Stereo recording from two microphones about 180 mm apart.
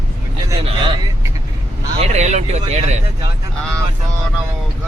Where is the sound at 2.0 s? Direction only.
40° right (ahead or behind).